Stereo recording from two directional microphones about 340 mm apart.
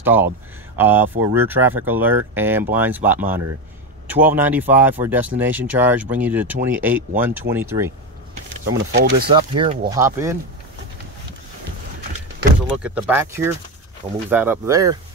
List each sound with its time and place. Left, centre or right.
0.0 s speech: centre
8.7 s speech: right
9.6 s speech: centre
12.7 s speech: centre